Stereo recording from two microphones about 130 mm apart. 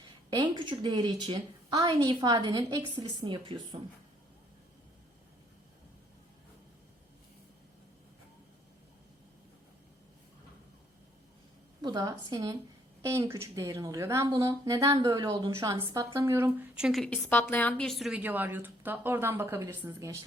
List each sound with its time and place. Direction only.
0.3 s a woman's voice: 35° right (ahead or behind)
11.8 s a woman's voice: 30° right (ahead or behind)
15.6 s a woman's voice: 20° right (ahead or behind); by 17.1 s centre (ahead or behind)
17.2 s a woman's voice: 15° left (ahead or behind)
17.8 s a woman's voice: centre (ahead or behind)
18.2 s speech: 15° right (ahead or behind)